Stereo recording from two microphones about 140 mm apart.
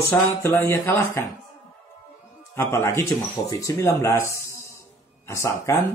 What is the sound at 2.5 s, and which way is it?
Speech, 20° left (ahead or behind).